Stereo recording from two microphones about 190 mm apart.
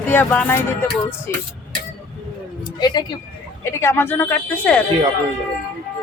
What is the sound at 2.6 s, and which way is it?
Speech, 20° left (ahead or behind).